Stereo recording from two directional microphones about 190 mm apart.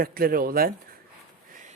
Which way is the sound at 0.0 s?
50° right (ahead or behind).